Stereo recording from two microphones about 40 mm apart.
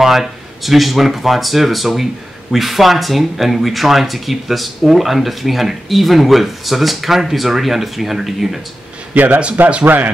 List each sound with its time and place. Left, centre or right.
0.0 s speech: centre
9.1 s a man's voice: right